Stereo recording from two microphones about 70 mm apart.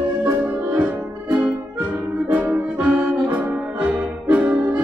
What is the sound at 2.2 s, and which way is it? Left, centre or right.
Music, right.